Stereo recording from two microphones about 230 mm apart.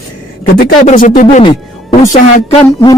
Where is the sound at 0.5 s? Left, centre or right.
Left.